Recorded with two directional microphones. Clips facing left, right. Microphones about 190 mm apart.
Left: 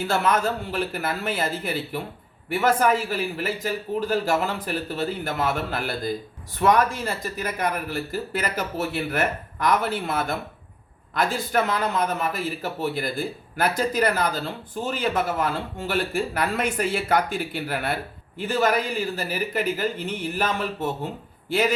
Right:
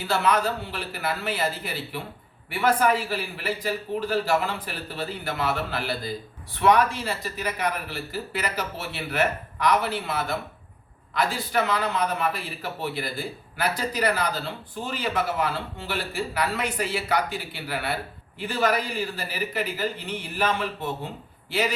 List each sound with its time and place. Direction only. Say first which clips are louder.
0.0 s a man's voice: left 1 dB; 45° left (ahead or behind)